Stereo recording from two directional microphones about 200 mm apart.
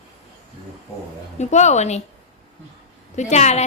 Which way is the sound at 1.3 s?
35° left (ahead or behind).